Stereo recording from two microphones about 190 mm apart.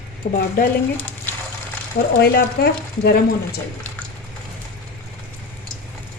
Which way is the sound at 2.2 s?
55° left (ahead or behind).